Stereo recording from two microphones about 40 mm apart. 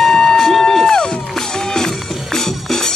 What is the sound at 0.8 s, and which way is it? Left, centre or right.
Music, centre.